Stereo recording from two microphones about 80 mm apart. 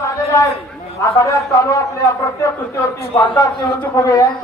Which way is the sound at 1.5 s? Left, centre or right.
Left.